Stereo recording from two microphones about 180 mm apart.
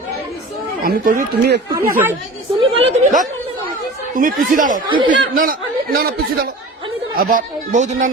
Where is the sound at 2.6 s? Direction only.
30° right (ahead or behind).